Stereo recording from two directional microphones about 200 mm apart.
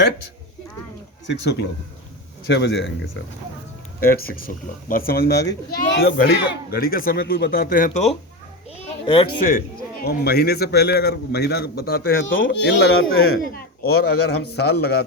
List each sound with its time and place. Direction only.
2.5 s a man's voice: 55° left (ahead or behind)
4.0 s speech: 45° left (ahead or behind)
9.0 s speech: 25° left (ahead or behind)
9.4 s speech: 45° left (ahead or behind)
12.1 s a man's voice: 75° left (ahead or behind); by 12.9 s 55° left (ahead or behind)
12.9 s speech: 90° left
13.4 s speech: 50° left (ahead or behind)
13.9 s a man's voice: 60° left (ahead or behind)